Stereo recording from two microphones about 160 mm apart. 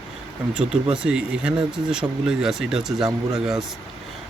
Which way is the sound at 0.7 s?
5° right (ahead or behind).